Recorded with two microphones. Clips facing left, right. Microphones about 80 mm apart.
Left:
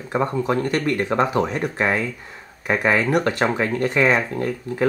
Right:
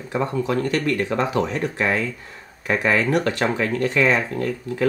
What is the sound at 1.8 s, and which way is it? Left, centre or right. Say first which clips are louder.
Speech: left 2 dB; centre.